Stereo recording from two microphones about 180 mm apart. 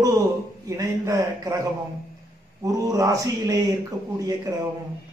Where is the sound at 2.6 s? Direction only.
20° right (ahead or behind).